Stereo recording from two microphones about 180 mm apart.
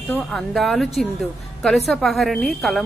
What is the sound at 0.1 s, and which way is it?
A woman's voice, centre (ahead or behind).